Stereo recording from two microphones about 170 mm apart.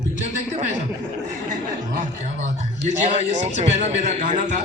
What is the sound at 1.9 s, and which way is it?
A man's voice, 45° right (ahead or behind).